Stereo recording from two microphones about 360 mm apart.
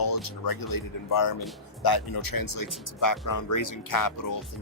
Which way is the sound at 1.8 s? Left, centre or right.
Left.